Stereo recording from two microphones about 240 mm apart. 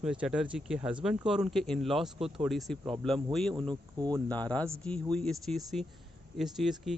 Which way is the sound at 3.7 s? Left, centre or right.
Centre.